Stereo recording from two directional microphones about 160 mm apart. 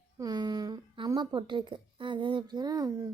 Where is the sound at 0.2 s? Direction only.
25° right (ahead or behind).